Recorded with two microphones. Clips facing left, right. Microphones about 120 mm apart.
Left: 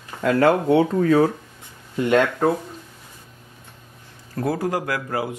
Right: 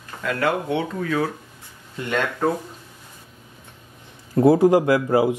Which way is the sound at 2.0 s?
10° left (ahead or behind).